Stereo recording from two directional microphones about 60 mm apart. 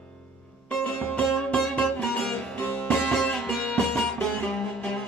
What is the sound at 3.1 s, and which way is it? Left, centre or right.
Music, centre.